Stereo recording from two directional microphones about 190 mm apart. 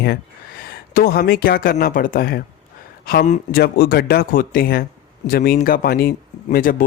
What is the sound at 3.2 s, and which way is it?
Speech, 40° left (ahead or behind).